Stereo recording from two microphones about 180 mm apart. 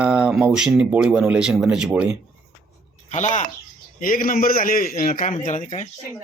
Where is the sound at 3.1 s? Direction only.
40° left (ahead or behind).